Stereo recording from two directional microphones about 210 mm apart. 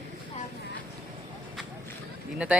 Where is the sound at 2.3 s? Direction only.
5° right (ahead or behind).